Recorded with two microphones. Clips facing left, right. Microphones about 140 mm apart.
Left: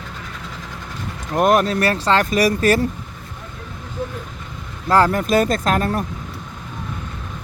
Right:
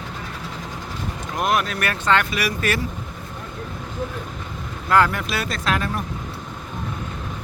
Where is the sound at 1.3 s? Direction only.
45° left (ahead or behind).